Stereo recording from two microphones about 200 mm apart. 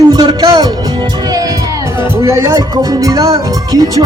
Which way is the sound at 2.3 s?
15° right (ahead or behind).